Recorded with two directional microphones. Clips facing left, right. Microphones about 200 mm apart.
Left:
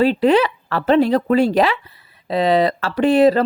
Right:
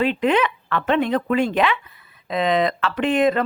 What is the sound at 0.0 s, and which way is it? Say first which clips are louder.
A woman's voice: left 5 dB; 35° left (ahead or behind).